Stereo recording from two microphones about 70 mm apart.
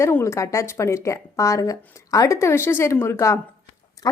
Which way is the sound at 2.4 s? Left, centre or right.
Left.